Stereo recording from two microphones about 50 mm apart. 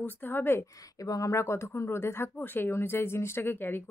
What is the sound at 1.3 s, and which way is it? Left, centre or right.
Speech, left.